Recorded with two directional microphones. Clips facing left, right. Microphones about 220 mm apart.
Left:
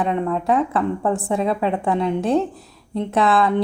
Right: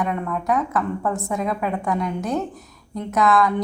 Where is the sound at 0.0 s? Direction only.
25° left (ahead or behind).